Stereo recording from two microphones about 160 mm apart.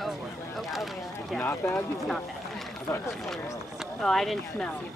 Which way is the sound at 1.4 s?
15° left (ahead or behind).